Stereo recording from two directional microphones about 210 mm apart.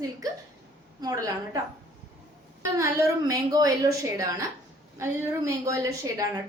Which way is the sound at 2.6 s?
15° right (ahead or behind).